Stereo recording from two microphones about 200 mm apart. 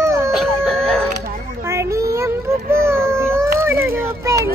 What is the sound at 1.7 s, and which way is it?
Child singing, 15° right (ahead or behind).